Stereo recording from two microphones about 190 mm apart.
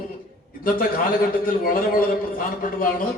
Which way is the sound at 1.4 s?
50° left (ahead or behind).